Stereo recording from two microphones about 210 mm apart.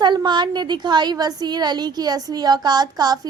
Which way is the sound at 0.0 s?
20° right (ahead or behind).